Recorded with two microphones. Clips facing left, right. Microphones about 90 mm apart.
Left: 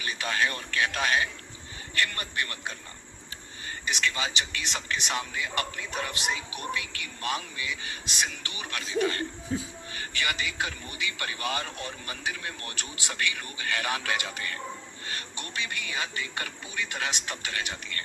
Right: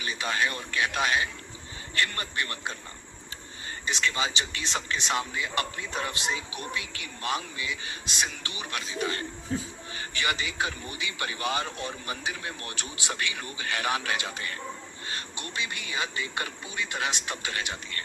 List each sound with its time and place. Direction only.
0.0 s speech: 25° right (ahead or behind)
3.8 s speech: 25° right (ahead or behind)
9.5 s speech: 5° left (ahead or behind)
9.9 s speech: 25° right (ahead or behind)